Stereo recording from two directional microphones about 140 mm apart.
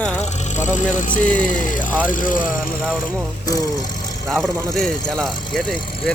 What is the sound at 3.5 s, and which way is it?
Speech, 25° left (ahead or behind).